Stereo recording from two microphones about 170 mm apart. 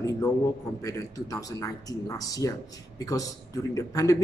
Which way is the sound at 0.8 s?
20° left (ahead or behind).